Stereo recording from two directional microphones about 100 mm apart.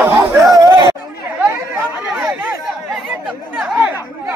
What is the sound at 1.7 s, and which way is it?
Chatter, 10° right (ahead or behind).